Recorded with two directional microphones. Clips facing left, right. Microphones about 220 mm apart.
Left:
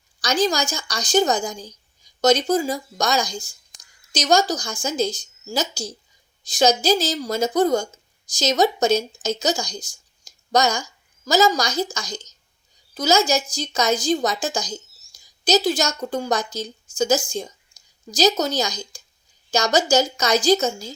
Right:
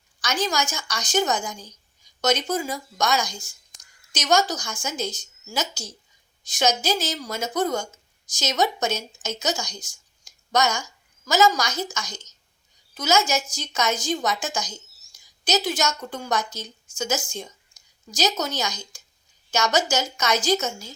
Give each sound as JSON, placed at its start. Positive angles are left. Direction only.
{"t": 0.2, "sound": "a woman's voice", "side_deg": 35}